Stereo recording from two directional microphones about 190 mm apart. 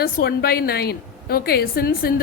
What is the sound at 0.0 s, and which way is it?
A woman's voice, 55° left (ahead or behind).